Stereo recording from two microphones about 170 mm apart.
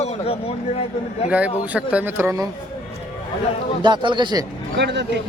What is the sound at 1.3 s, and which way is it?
A man's voice, 10° right (ahead or behind).